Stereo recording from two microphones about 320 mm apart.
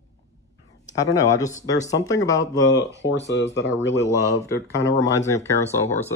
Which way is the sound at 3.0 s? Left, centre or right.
Left.